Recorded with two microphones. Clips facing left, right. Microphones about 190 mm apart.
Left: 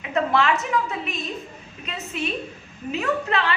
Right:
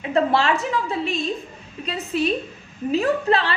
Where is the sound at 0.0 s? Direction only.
35° right (ahead or behind).